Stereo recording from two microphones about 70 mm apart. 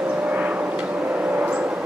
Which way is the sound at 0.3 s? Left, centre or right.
Right.